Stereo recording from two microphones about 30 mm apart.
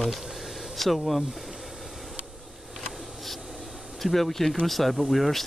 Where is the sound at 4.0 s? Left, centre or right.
Centre.